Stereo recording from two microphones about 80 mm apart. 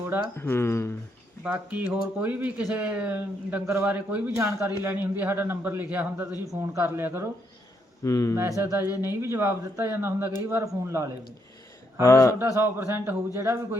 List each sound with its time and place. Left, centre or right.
0.3 s speech: left
1.5 s speech: centre
4.4 s speech: right
6.5 s speech: right
8.0 s speech: left
8.4 s speech: right
12.0 s speech: left
12.4 s speech: right